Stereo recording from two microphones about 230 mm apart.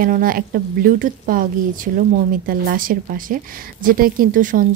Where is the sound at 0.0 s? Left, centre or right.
Right.